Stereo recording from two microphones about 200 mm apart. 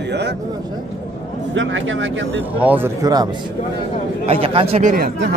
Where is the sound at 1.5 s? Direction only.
70° right (ahead or behind).